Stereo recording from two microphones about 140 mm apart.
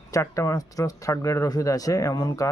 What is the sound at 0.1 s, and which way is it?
Speech, 20° left (ahead or behind).